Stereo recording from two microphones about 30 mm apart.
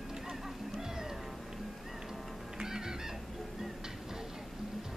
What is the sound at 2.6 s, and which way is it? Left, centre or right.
Goose, right.